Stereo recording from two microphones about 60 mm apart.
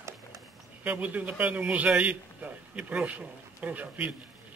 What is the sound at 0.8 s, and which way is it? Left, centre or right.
A man's voice, right.